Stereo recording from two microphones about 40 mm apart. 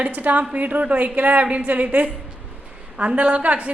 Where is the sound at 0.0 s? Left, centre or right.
Right.